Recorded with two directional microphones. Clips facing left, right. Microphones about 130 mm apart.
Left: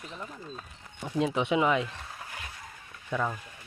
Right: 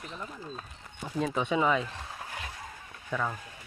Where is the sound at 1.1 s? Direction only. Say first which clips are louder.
Left 2 dB; 5° left (ahead or behind).